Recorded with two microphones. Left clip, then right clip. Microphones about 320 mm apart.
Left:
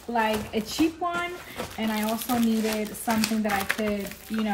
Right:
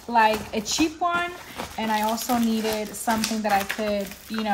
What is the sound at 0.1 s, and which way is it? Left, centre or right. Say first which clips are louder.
Speech: right 5 dB; right.